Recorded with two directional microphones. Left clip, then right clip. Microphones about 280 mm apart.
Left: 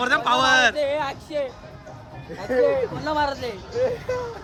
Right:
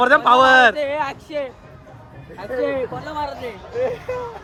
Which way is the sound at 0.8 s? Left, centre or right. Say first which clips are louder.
Right 1 dB; right.